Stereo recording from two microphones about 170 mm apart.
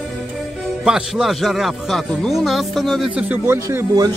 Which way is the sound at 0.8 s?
5° right (ahead or behind).